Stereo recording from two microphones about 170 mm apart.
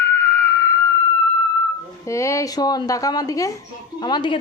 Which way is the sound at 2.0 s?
15° left (ahead or behind).